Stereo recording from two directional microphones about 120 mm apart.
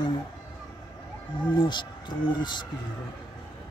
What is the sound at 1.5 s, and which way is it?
Speech, 40° left (ahead or behind).